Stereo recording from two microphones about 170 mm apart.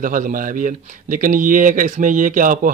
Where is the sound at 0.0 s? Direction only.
50° right (ahead or behind).